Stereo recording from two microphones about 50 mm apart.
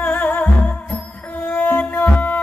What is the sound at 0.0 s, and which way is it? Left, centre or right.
Music, left.